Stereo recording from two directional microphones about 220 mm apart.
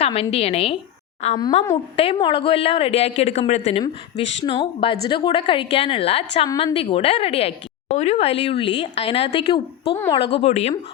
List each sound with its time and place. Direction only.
0.0 s a woman's voice: 25° left (ahead or behind)
10.3 s a woman's voice: 30° left (ahead or behind)